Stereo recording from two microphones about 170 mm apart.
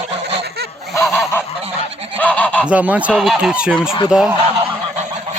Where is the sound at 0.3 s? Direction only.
70° right (ahead or behind).